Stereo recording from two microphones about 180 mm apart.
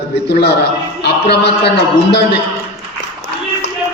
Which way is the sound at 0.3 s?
70° left (ahead or behind).